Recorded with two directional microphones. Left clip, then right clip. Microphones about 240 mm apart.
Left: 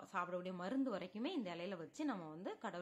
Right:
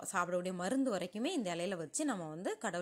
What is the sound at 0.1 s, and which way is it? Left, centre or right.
A woman's voice, right.